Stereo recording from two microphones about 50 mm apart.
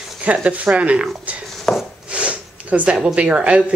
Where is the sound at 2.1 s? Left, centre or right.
Right.